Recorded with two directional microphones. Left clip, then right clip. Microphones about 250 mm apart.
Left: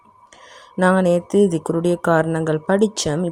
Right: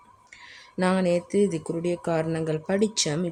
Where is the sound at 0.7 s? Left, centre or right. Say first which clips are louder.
Left 8 dB; centre.